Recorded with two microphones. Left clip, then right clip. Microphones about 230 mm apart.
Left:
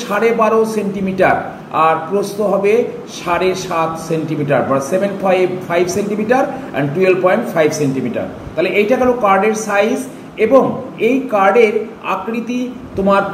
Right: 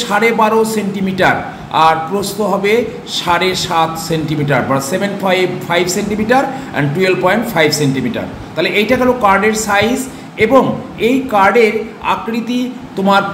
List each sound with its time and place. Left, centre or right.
0.1 s a man's voice: centre